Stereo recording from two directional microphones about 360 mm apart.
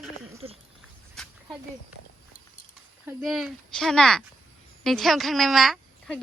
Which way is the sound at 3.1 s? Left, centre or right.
Centre.